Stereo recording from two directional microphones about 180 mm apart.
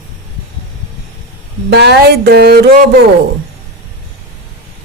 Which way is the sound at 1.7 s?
65° right (ahead or behind).